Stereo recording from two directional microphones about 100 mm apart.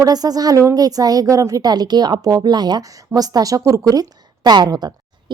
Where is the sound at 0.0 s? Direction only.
40° right (ahead or behind).